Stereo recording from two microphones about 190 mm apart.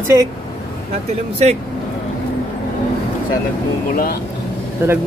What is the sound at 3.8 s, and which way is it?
Speech, 50° left (ahead or behind).